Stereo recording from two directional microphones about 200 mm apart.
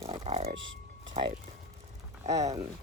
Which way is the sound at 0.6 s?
70° right (ahead or behind).